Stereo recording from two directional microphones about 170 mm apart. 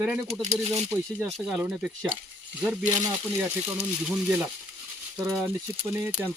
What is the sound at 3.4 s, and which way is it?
Speech, 10° right (ahead or behind).